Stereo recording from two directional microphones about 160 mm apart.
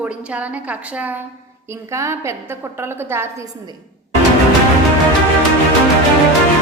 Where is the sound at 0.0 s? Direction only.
5° right (ahead or behind).